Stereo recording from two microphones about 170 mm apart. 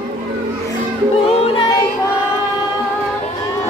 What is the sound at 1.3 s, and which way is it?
Music, 35° left (ahead or behind).